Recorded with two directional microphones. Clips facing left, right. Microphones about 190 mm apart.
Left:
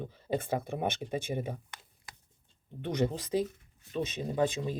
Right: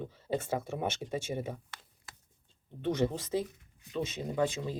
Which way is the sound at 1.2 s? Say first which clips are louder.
Left 1 dB; 15° left (ahead or behind).